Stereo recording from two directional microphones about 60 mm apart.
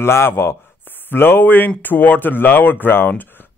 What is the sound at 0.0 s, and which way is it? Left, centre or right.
A man's voice, left.